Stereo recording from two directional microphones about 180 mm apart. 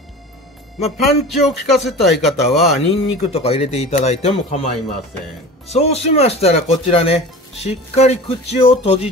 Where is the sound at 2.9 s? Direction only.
35° left (ahead or behind).